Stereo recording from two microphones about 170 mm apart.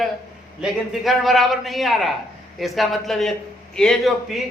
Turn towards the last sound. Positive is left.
turn(degrees=0)  # may be behind; listen again after turning